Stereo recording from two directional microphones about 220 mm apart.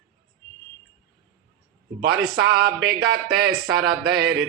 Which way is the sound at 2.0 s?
45° right (ahead or behind).